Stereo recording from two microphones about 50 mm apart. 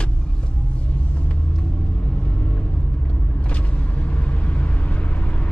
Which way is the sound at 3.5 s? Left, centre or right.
Left.